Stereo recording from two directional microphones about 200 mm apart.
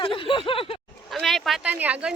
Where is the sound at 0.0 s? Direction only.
25° left (ahead or behind).